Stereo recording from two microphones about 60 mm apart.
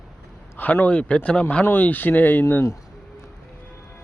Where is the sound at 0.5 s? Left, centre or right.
Left.